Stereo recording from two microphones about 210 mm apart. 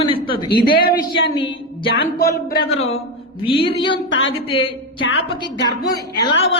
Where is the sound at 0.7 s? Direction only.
45° left (ahead or behind).